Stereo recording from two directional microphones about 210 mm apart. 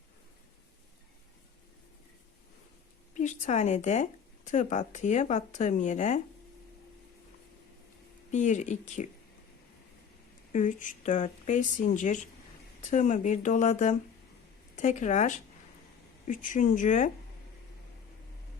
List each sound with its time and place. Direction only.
3.2 s speech: 35° left (ahead or behind)
8.3 s speech: 35° left (ahead or behind)
10.5 s speech: 35° left (ahead or behind)